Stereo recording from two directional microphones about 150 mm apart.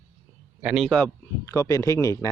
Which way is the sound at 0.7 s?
5° left (ahead or behind).